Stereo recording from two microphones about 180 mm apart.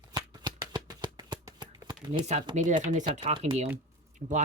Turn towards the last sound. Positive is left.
turn(degrees=-45)  # may be behind; listen again after turning